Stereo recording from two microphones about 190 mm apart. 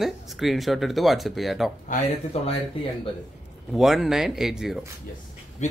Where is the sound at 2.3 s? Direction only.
35° left (ahead or behind).